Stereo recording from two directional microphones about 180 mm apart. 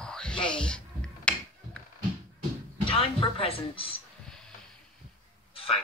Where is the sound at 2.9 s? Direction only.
30° left (ahead or behind).